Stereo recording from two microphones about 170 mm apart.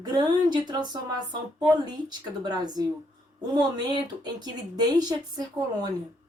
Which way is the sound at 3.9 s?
25° right (ahead or behind).